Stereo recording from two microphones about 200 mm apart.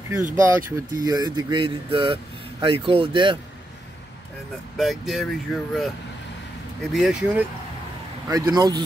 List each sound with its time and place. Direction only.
0.3 s speech: 10° right (ahead or behind)
1.0 s speech: 20° right (ahead or behind)
4.7 s speech: centre (ahead or behind)
8.3 s speech: 20° right (ahead or behind)